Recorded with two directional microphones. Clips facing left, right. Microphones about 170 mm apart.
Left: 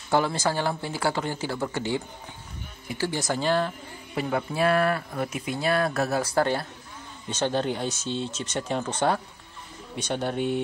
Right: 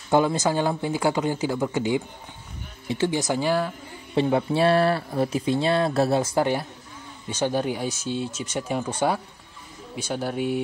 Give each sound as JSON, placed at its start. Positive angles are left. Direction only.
{"t": 0.1, "sound": "speech", "side_deg": -20}
{"t": 4.1, "sound": "speech", "side_deg": -25}